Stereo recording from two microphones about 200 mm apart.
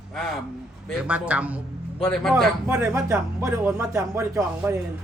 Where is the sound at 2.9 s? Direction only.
15° right (ahead or behind).